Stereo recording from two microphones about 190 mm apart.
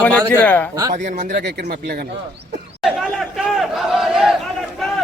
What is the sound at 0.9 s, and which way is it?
Speech, 40° right (ahead or behind).